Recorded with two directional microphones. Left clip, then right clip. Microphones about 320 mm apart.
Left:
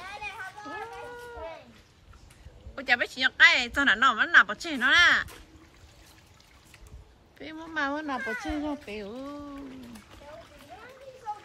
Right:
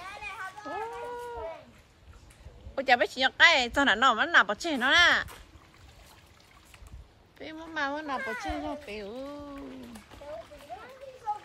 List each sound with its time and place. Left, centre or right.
0.0 s children playing: centre
2.7 s a woman's voice: centre
7.3 s a woman's voice: centre
8.2 s speech: right
8.8 s a woman's voice: centre
9.7 s splash: right